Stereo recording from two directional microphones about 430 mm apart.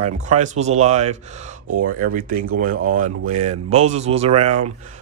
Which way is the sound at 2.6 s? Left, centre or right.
Centre.